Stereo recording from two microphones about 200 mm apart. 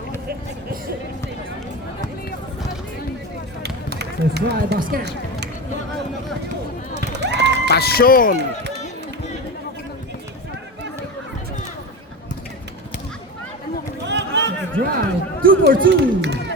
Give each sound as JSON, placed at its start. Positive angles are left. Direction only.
{"t": 3.6, "sound": "a sound", "side_deg": -55}
{"t": 7.0, "sound": "run", "side_deg": -60}
{"t": 7.7, "sound": "speech", "side_deg": 50}
{"t": 14.1, "sound": "a sound", "side_deg": -60}
{"t": 14.9, "sound": "speech", "side_deg": -45}
{"t": 15.9, "sound": "speech", "side_deg": -60}